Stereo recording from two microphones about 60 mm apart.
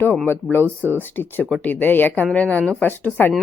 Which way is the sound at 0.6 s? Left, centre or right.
Right.